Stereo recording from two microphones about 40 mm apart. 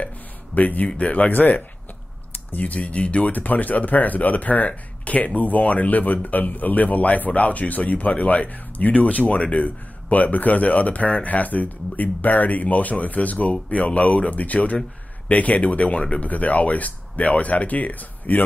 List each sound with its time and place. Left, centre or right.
0.6 s a man's voice: left